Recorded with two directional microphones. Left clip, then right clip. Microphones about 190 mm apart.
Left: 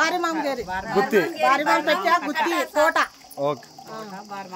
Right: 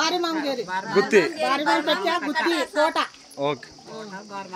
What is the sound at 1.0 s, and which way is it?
Speech, 5° left (ahead or behind).